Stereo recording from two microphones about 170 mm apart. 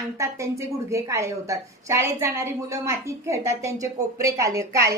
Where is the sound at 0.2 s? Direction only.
15° right (ahead or behind).